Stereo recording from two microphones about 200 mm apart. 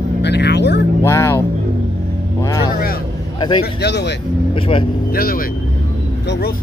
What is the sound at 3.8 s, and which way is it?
Speech, 60° left (ahead or behind).